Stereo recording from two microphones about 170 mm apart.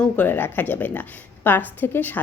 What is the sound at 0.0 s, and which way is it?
A woman's voice, 10° left (ahead or behind).